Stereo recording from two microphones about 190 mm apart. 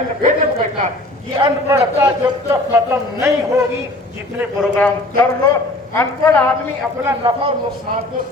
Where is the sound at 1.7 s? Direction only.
20° right (ahead or behind).